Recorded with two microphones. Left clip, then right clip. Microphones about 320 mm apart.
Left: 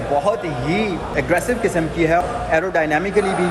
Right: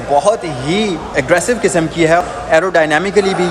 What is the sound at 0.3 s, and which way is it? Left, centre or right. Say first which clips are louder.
Speech: right 5 dB; centre.